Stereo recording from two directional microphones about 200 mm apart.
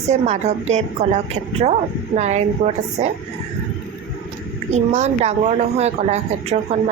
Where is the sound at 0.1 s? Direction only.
35° right (ahead or behind).